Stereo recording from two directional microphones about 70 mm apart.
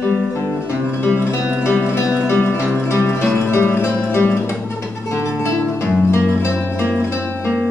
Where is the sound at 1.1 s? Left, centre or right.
Left.